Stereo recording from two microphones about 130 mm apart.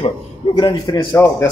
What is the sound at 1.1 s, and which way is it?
Speech, 20° left (ahead or behind).